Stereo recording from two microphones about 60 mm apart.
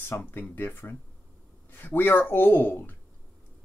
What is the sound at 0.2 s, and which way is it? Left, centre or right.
Speech, left.